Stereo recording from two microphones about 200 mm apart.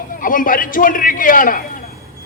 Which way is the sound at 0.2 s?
45° left (ahead or behind).